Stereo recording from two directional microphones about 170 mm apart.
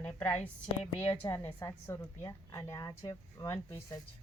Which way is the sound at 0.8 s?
30° left (ahead or behind).